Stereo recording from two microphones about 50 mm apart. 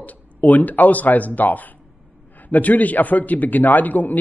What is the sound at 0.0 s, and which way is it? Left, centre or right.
A man's voice, left.